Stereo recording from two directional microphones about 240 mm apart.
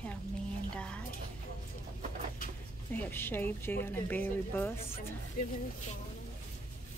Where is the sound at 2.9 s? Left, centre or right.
Centre.